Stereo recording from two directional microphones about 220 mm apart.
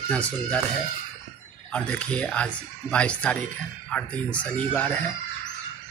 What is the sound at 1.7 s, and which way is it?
Speech, 5° left (ahead or behind).